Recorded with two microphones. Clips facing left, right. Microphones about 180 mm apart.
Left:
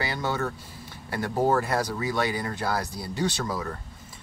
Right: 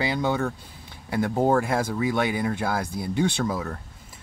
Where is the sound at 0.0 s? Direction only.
15° right (ahead or behind).